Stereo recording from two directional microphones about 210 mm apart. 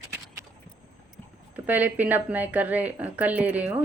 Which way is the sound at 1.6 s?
10° right (ahead or behind).